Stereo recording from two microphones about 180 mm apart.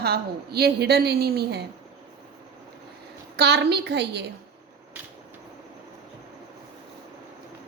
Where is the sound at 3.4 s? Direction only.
65° right (ahead or behind).